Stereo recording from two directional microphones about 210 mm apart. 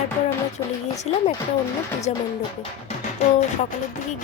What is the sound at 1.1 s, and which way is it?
Speech, 30° left (ahead or behind).